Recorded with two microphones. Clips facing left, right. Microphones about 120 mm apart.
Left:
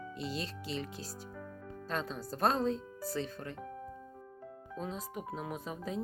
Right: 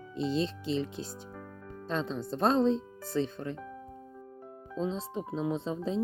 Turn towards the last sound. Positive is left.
turn(degrees=-25)  # may be behind; listen again after turning